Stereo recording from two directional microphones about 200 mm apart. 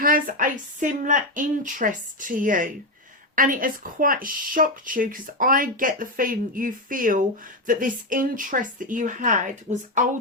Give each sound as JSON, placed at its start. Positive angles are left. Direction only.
{"t": 0.0, "sound": "a woman's voice", "side_deg": -45}